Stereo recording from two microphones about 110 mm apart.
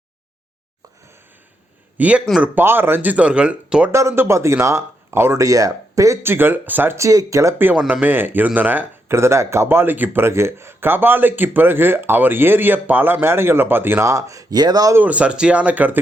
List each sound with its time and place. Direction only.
2.0 s speech: 10° right (ahead or behind)
3.9 s speech: 25° right (ahead or behind)
7.8 s speech: 5° right (ahead or behind)
8.0 s speech: 15° right (ahead or behind); by 14.9 s 35° right (ahead or behind)
14.9 s speech: 15° right (ahead or behind)